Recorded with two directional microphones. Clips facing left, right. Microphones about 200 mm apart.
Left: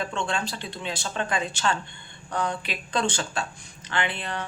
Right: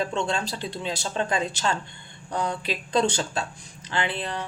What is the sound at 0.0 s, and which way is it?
Speech, 35° right (ahead or behind).